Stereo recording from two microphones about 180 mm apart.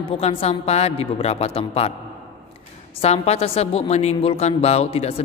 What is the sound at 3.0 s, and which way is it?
A woman's voice, 35° left (ahead or behind).